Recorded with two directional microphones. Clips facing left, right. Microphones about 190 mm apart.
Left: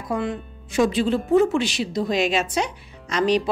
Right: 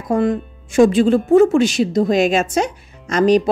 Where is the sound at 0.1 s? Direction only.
45° right (ahead or behind).